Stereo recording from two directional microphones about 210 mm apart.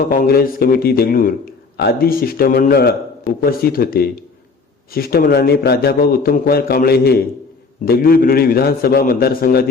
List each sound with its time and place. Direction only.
0.1 s a man's voice: 45° left (ahead or behind)